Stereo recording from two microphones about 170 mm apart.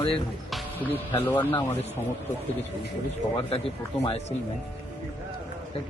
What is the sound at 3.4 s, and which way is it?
Speech, 35° left (ahead or behind).